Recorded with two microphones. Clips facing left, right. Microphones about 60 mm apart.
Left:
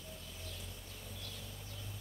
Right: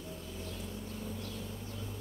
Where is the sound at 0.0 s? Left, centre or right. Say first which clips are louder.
Right 7 dB; right.